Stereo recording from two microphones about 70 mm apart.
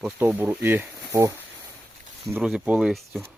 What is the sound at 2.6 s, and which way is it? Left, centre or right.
Speech, centre.